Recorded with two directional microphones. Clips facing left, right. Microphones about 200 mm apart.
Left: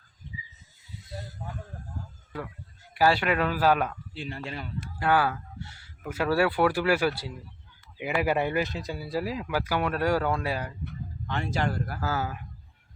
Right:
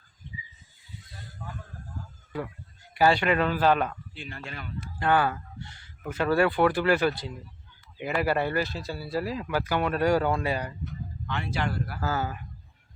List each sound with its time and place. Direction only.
2.9 s speech: 5° left (ahead or behind)
4.1 s speech: 30° left (ahead or behind)
4.9 s speech: 5° left (ahead or behind)
11.3 s speech: 45° left (ahead or behind)
12.0 s speech: 5° left (ahead or behind)